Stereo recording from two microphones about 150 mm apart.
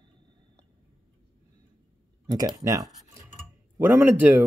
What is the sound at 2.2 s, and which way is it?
Speech, 25° right (ahead or behind).